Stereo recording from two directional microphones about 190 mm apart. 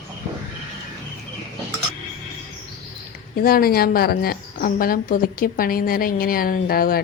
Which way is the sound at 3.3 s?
50° left (ahead or behind).